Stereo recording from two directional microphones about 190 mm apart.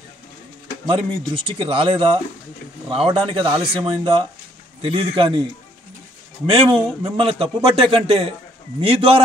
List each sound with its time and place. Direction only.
0.8 s a man's voice: 30° right (ahead or behind)
6.4 s a man's voice: 30° right (ahead or behind)